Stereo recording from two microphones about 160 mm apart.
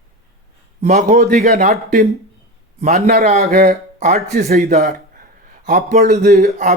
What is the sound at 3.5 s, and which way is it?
Speech, 70° right (ahead or behind).